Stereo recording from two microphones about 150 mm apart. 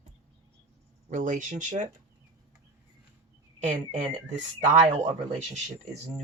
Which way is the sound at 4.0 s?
50° right (ahead or behind).